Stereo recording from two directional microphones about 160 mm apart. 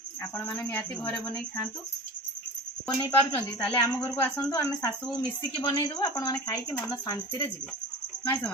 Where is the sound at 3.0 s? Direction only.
10° left (ahead or behind).